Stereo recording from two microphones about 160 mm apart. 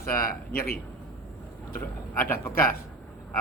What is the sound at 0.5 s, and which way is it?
Speech, 65° left (ahead or behind).